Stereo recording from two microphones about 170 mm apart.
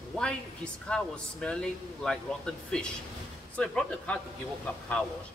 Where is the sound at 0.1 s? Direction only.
5° left (ahead or behind).